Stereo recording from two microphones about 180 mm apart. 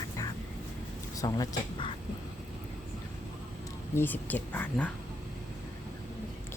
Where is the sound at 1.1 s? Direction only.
20° left (ahead or behind).